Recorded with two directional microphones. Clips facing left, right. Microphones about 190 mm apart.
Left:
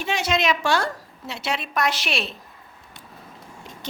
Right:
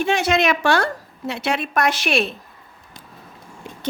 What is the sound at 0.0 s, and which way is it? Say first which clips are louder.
A woman's voice: right 5 dB; 55° right (ahead or behind).